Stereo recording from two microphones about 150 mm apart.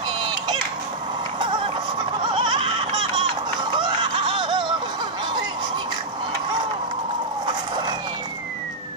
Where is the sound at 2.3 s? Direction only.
35° right (ahead or behind).